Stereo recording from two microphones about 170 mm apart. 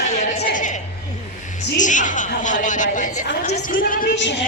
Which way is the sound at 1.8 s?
45° left (ahead or behind).